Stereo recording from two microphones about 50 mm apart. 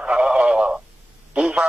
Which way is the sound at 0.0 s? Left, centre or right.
Centre.